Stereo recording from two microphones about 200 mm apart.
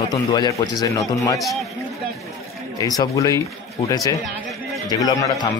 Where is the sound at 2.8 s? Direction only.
15° left (ahead or behind).